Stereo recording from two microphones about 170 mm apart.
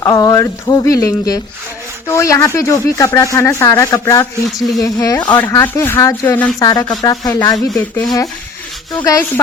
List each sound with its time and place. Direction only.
0.0 s speech: 20° left (ahead or behind)
6.7 s speech: 25° left (ahead or behind)
7.7 s speech: 5° left (ahead or behind)
9.0 s speech: 20° left (ahead or behind)